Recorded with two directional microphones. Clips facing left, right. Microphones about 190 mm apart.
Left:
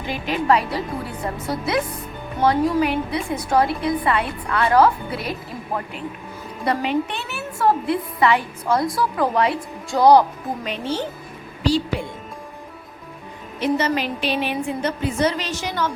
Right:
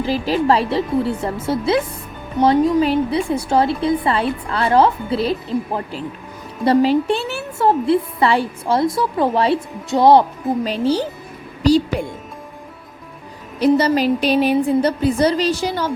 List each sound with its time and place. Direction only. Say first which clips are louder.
0.0 s a woman's voice: right 6 dB; 30° right (ahead or behind)
13.6 s a woman's voice: right 6 dB; 35° right (ahead or behind)